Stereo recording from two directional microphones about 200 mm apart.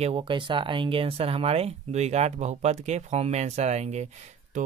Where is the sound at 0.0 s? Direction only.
25° right (ahead or behind).